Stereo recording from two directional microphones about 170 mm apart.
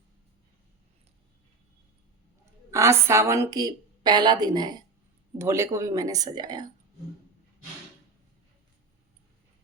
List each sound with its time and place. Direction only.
2.7 s a woman's voice: 15° right (ahead or behind)